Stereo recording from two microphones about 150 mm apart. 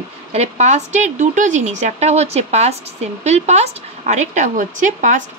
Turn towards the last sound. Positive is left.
turn(degrees=-60)  # may be behind; listen again after turning